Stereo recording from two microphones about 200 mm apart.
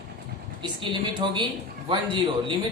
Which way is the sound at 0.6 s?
25° right (ahead or behind).